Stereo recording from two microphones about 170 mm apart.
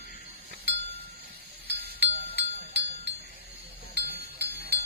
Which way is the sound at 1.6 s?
70° right (ahead or behind).